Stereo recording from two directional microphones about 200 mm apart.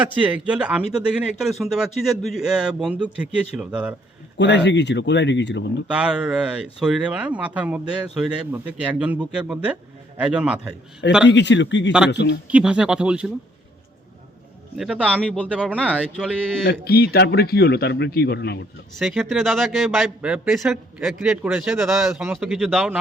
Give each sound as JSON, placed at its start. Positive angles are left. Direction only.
{"t": 0.0, "sound": "speech", "side_deg": -5}
{"t": 4.4, "sound": "speech", "side_deg": 60}
{"t": 5.9, "sound": "speech", "side_deg": -5}
{"t": 11.3, "sound": "speech", "side_deg": 60}
{"t": 11.9, "sound": "speech", "side_deg": -5}
{"t": 12.1, "sound": "speech", "side_deg": 60}
{"t": 12.5, "sound": "speech", "side_deg": -5}
{"t": 14.8, "sound": "a man's voice", "side_deg": -5}
{"t": 15.2, "sound": "speech", "side_deg": 5}
{"t": 16.6, "sound": "a man's voice", "side_deg": 50}
{"t": 18.9, "sound": "speech", "side_deg": 0}